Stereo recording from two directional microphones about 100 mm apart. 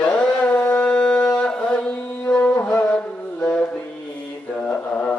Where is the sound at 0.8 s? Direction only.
10° left (ahead or behind).